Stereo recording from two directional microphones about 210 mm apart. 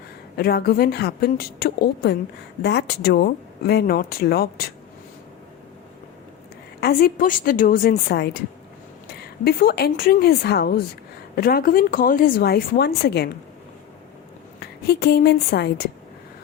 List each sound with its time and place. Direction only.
0.3 s speech: 45° left (ahead or behind)
6.7 s a woman's voice: 45° left (ahead or behind)
14.6 s a woman's voice: 50° left (ahead or behind)